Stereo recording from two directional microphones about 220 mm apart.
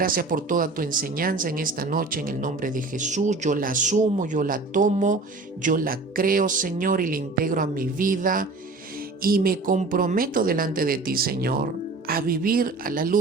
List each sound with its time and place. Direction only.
0.0 s speech: 40° right (ahead or behind)